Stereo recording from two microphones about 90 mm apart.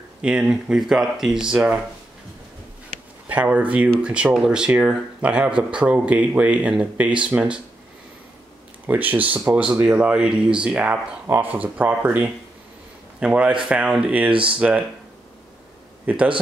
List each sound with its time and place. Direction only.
0.2 s speech: 10° right (ahead or behind)
3.3 s speech: 15° right (ahead or behind)
8.8 s speech: 20° right (ahead or behind)
16.1 s speech: 15° right (ahead or behind)